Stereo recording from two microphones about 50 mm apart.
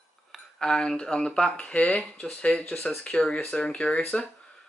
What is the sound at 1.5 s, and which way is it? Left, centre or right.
Speech, left.